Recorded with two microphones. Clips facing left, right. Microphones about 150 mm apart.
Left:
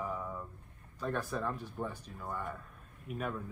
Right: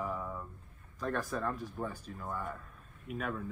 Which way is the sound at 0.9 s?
10° left (ahead or behind).